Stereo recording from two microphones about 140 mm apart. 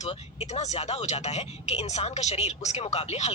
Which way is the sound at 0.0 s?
50° left (ahead or behind).